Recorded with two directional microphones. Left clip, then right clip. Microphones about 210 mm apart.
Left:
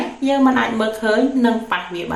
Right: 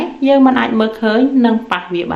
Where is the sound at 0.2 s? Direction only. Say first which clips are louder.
Right 5 dB; 40° right (ahead or behind).